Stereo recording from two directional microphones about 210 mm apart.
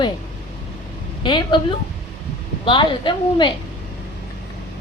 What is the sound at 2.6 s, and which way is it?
Speech, 25° left (ahead or behind).